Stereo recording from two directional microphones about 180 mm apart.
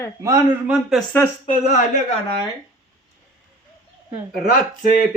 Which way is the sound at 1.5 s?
40° left (ahead or behind).